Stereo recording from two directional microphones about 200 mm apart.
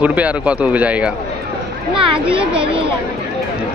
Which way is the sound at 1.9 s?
25° right (ahead or behind).